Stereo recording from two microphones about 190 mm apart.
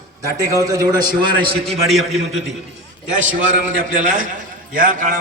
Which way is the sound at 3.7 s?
45° right (ahead or behind).